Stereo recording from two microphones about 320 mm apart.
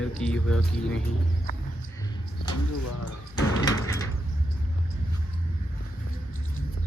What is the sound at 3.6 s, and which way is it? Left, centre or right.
Sliding door, centre.